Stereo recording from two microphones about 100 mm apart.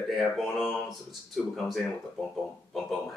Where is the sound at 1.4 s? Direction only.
Centre (ahead or behind).